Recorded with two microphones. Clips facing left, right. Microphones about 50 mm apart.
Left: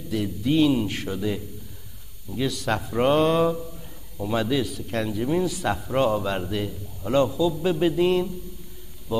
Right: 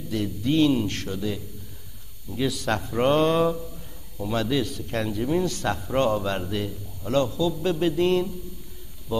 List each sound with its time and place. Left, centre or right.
0.1 s speech: centre
2.3 s speech: centre